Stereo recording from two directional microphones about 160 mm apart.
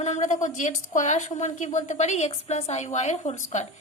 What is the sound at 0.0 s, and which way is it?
Speech, 45° left (ahead or behind).